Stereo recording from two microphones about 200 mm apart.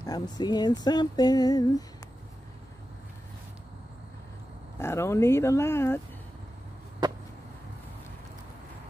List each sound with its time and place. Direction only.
0.0 s speech: 20° left (ahead or behind)
4.7 s speech: 10° left (ahead or behind)
7.0 s a sound: 20° right (ahead or behind)